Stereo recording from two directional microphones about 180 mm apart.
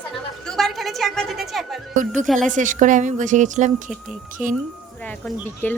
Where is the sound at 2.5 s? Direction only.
45° right (ahead or behind).